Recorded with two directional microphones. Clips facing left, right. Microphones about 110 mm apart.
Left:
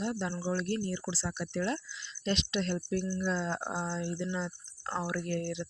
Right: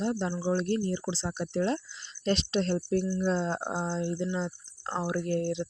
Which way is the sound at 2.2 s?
40° right (ahead or behind).